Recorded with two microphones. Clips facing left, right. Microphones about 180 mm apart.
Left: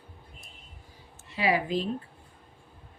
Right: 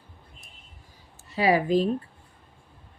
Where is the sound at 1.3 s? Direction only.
40° right (ahead or behind).